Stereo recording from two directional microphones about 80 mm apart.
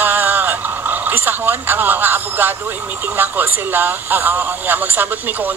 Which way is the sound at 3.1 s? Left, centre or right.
Right.